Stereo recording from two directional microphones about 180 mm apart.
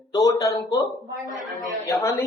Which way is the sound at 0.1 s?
20° left (ahead or behind).